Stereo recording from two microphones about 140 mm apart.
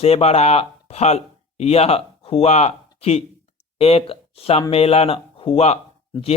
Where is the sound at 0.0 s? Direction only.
45° left (ahead or behind).